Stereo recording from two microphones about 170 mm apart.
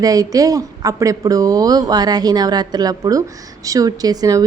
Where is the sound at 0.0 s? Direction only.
20° right (ahead or behind).